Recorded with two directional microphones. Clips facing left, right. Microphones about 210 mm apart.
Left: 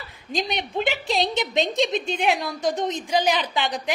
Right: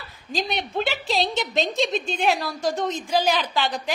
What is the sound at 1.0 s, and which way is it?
A woman's voice, 20° left (ahead or behind).